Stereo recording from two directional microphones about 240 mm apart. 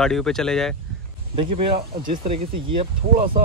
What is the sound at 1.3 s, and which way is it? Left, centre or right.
A man's voice, right.